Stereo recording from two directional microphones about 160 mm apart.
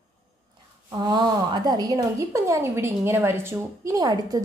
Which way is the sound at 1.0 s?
25° right (ahead or behind).